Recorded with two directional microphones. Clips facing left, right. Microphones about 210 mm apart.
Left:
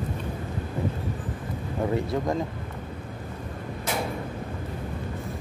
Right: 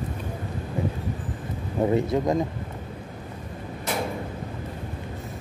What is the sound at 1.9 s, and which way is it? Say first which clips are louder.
Speech: right 4 dB; 20° right (ahead or behind).